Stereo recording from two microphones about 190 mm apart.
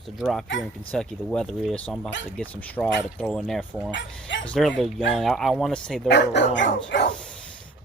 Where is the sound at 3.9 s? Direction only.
70° left (ahead or behind).